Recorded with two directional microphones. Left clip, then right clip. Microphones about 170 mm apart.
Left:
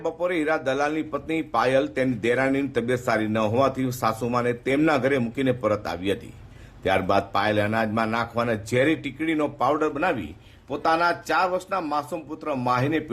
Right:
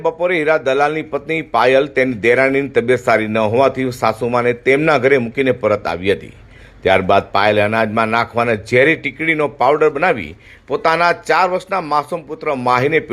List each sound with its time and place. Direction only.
0.0 s a man's voice: 10° right (ahead or behind)